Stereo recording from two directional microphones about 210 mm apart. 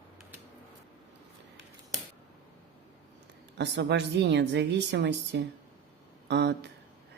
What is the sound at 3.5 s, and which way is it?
A woman's voice, 55° right (ahead or behind).